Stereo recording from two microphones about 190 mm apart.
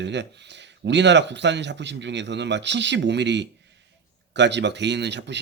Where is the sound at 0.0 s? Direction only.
65° right (ahead or behind).